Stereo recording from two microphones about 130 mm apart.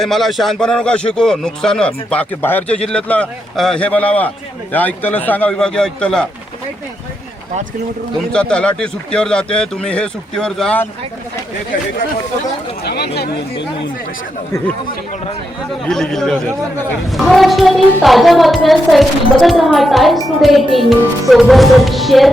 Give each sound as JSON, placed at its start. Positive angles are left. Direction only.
{"t": 0.0, "sound": "a woman's voice", "side_deg": 0}
{"t": 8.3, "sound": "speech", "side_deg": 5}
{"t": 15.9, "sound": "a woman's voice", "side_deg": 5}